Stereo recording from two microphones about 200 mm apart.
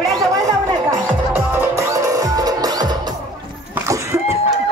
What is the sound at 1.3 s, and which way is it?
Music, 15° right (ahead or behind).